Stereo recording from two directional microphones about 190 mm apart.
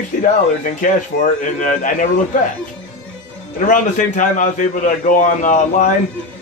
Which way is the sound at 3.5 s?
40° left (ahead or behind).